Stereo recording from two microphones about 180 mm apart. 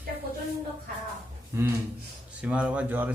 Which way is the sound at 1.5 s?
15° right (ahead or behind).